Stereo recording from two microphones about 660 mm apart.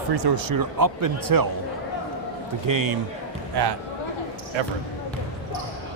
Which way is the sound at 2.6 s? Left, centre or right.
Right.